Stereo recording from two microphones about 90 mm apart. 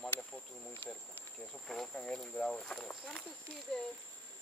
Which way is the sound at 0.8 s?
20° left (ahead or behind).